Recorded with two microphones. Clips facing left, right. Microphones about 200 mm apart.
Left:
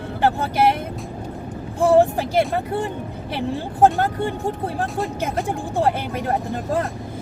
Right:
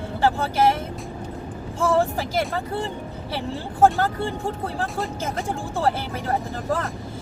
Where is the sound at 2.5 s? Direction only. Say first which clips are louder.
Left 4 dB; 15° left (ahead or behind).